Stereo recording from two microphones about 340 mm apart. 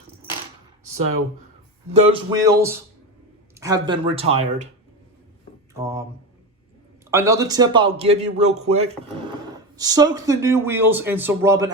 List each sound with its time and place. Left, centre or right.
2.0 s speech: centre
5.8 s speech: centre
7.1 s speech: centre